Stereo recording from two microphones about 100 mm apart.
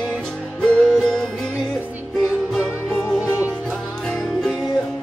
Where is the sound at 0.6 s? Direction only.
5° left (ahead or behind).